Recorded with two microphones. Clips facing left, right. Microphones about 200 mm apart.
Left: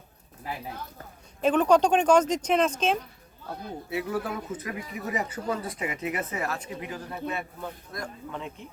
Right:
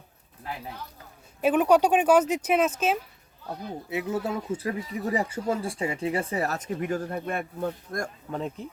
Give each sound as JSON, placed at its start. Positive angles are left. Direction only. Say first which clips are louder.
{"t": 1.4, "sound": "speech", "louder": "right 1 dB", "side_deg": -10}
{"t": 3.8, "sound": "speech", "louder": "right 1 dB", "side_deg": -20}